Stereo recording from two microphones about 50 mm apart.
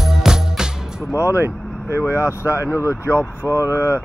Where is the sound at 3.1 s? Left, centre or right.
Left.